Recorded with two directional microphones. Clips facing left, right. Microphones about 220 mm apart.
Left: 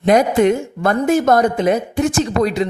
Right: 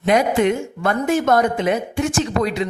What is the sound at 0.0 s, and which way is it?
Speech, 40° left (ahead or behind).